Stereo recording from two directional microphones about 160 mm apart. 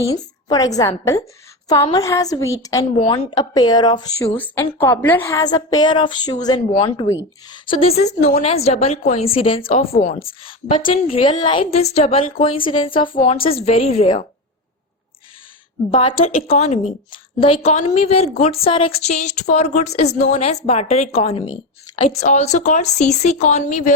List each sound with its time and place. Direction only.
0.1 s a woman's voice: 25° left (ahead or behind)
9.9 s speech: 50° left (ahead or behind)
10.2 s a woman's voice: 35° left (ahead or behind)
15.9 s a woman's voice: 35° left (ahead or behind)